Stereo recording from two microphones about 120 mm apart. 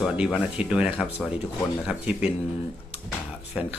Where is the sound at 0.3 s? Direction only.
10° right (ahead or behind).